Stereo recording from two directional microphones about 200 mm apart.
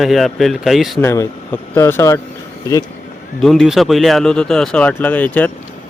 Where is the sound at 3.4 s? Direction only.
Centre (ahead or behind).